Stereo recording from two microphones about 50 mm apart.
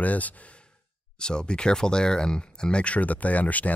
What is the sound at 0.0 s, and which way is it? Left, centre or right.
Speech, left.